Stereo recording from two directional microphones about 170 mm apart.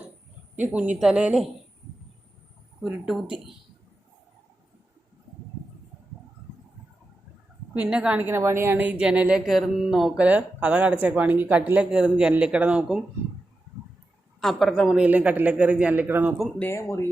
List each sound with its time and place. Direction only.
0.5 s a woman's voice: 10° right (ahead or behind)
2.8 s speech: 5° right (ahead or behind)
7.7 s a woman's voice: 5° right (ahead or behind)
14.4 s a woman's voice: centre (ahead or behind)
16.6 s speech: 15° left (ahead or behind)